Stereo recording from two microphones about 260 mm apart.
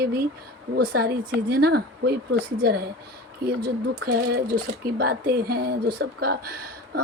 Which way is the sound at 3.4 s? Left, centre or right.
Right.